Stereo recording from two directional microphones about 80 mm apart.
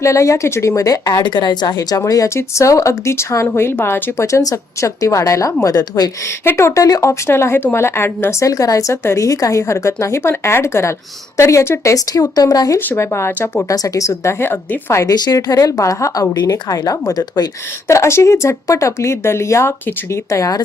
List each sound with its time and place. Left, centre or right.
0.0 s speech: left
1.2 s a woman's voice: left
2.0 s speech: left
6.4 s speech: left
13.0 s speech: left
13.7 s speech: left
14.1 s speech: left
15.0 s speech: left
15.8 s speech: left
17.8 s speech: left